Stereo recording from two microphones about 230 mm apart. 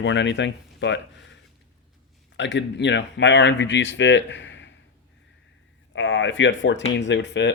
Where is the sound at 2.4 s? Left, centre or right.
Left.